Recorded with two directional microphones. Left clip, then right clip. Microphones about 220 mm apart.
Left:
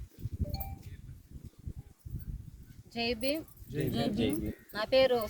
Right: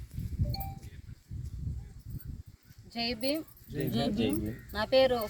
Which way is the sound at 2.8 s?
Centre (ahead or behind).